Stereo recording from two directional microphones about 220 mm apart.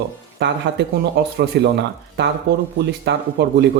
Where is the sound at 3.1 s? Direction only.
50° right (ahead or behind).